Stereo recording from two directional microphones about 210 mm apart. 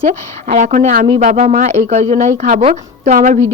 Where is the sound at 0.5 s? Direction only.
35° right (ahead or behind).